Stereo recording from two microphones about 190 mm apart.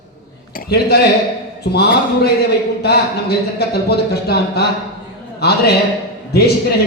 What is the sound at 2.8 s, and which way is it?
A man's voice, 60° left (ahead or behind).